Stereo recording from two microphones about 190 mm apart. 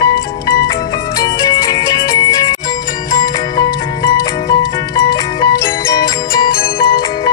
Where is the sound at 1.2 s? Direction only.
20° left (ahead or behind).